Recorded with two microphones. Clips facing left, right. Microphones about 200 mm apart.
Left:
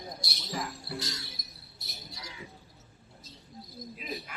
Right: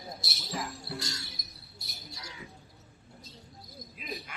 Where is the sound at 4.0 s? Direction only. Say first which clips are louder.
Left 1 dB; centre (ahead or behind).